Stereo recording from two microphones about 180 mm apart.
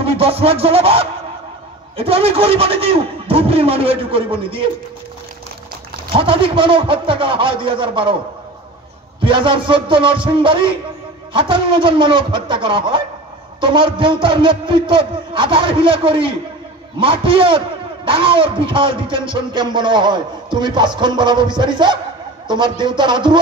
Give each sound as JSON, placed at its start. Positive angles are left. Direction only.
{"t": 0.0, "sound": "music", "side_deg": -30}
{"t": 2.0, "sound": "a man's voice", "side_deg": -30}
{"t": 6.1, "sound": "a man's voice", "side_deg": -30}
{"t": 9.2, "sound": "a man's voice", "side_deg": -30}